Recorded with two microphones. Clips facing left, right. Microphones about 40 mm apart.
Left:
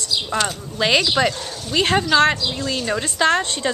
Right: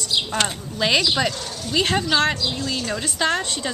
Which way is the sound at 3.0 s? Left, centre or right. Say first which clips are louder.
Left 5 dB; centre.